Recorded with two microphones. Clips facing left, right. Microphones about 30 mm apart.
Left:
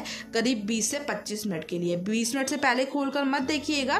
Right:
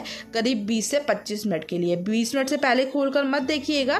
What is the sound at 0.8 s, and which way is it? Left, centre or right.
Speech, right.